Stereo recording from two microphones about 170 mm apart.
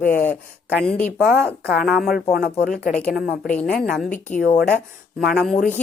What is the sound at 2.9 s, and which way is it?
Speech, 5° left (ahead or behind).